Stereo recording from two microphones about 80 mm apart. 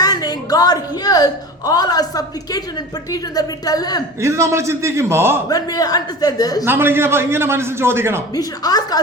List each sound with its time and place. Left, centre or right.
0.0 s a woman's voice: left
4.2 s a man's voice: right
5.5 s a man's voice: left
6.7 s a man's voice: right
8.4 s a man's voice: left